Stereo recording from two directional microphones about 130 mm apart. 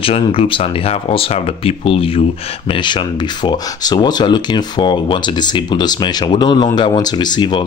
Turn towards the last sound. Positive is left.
turn(degrees=35)  # may be behind; listen again after turning